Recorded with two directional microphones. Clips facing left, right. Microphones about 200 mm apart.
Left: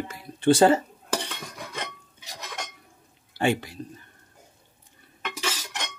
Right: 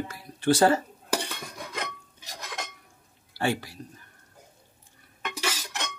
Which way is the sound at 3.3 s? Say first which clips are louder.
Left 3 dB; 20° left (ahead or behind).